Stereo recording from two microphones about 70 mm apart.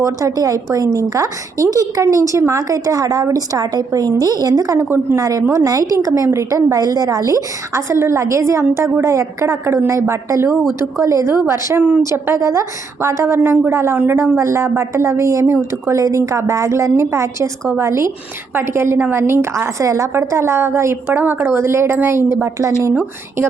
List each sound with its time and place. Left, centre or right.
0.0 s a woman's voice: right
4.8 s a woman's voice: right
5.6 s a woman's voice: right